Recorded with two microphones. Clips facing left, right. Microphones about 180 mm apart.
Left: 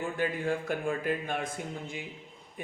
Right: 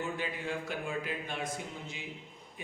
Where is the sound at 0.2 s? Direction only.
50° left (ahead or behind).